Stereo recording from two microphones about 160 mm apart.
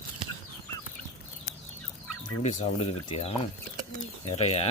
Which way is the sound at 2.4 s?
45° left (ahead or behind).